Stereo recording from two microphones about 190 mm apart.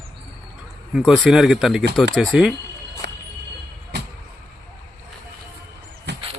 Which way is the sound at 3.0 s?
65° right (ahead or behind).